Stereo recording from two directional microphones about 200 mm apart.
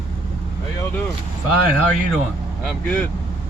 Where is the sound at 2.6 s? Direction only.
10° left (ahead or behind).